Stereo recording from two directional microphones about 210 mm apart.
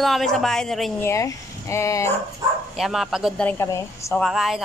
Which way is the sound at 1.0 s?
15° left (ahead or behind).